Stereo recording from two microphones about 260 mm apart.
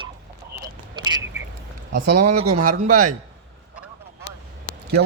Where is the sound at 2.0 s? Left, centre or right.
Right.